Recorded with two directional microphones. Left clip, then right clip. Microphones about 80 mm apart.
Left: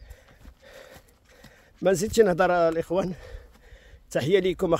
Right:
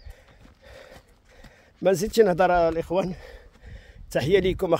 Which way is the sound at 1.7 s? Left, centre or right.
Centre.